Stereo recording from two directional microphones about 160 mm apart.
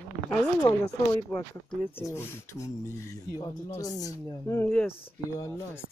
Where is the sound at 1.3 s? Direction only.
5° left (ahead or behind).